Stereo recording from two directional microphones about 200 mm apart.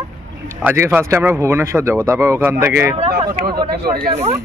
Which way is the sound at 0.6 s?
10° right (ahead or behind).